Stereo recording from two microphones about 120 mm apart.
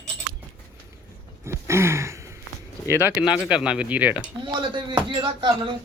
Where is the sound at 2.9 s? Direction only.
20° right (ahead or behind).